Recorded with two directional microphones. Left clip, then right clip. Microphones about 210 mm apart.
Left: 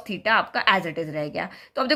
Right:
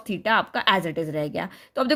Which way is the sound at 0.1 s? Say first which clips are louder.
Left 1 dB; 35° right (ahead or behind).